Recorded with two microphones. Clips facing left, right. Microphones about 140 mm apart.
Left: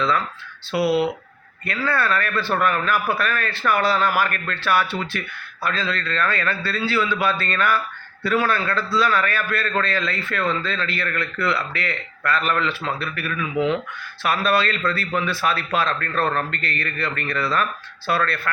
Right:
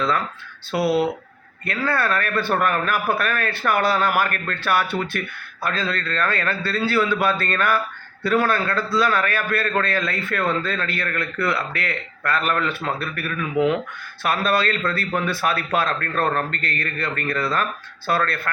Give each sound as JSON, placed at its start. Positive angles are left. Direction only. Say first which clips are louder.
{"t": 1.6, "sound": "a man's voice", "louder": "even", "side_deg": -45}